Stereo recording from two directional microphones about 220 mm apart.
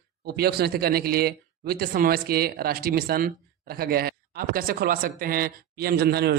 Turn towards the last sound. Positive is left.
turn(degrees=-45)  # may be behind; listen again after turning